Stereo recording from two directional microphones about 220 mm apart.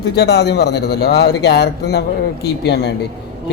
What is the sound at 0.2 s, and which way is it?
A man's voice, 50° left (ahead or behind).